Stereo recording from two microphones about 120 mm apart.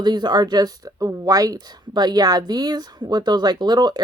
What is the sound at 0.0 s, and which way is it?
Speech, 35° right (ahead or behind).